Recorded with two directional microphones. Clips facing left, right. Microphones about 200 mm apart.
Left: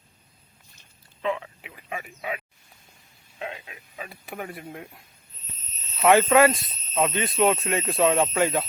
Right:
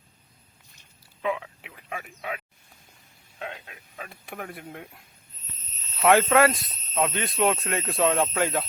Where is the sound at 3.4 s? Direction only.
5° left (ahead or behind).